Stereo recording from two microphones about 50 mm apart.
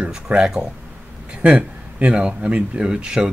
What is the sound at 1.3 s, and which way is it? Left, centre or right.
Speech, right.